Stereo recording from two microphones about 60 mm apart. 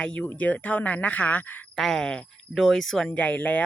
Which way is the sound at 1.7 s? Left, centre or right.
Centre.